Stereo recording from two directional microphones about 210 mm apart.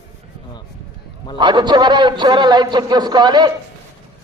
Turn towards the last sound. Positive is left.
turn(degrees=-20)  # may be behind; listen again after turning